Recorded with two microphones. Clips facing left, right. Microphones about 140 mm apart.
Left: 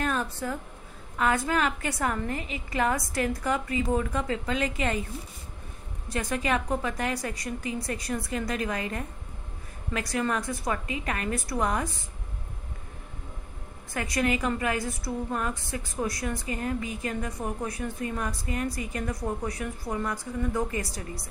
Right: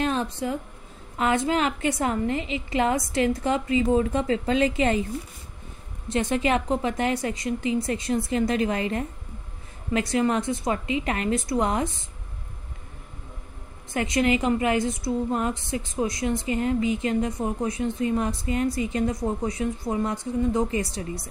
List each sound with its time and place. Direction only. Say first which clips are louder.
0.0 s a woman's voice: right 4 dB; 25° right (ahead or behind)
6.0 s a woman's voice: right 5 dB; 25° right (ahead or behind)
13.9 s a woman's voice: right 5 dB; 25° right (ahead or behind)